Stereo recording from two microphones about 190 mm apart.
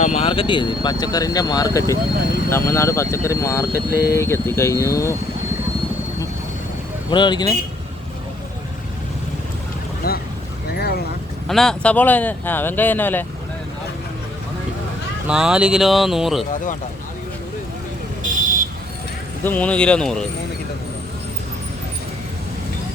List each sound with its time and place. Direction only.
0.0 s speech: 35° left (ahead or behind); by 5.1 s 15° left (ahead or behind)
7.1 s speech: 25° left (ahead or behind)
10.0 s speech: 55° left (ahead or behind)
10.8 s vehicle: 55° left (ahead or behind)
11.4 s speech: centre (ahead or behind)
15.3 s speech: 5° right (ahead or behind)
18.2 s vehicle: 45° right (ahead or behind)
19.5 s speech: 10° left (ahead or behind)